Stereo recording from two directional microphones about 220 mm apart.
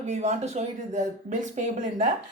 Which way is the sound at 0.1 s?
30° right (ahead or behind).